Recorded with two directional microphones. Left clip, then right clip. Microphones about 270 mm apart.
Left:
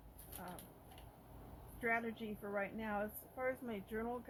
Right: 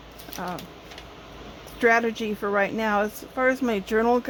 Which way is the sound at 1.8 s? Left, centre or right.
Right.